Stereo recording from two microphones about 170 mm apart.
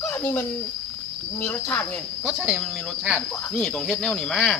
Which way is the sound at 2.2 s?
Centre (ahead or behind).